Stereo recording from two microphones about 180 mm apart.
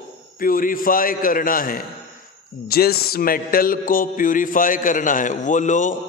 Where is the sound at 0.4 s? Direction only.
50° left (ahead or behind).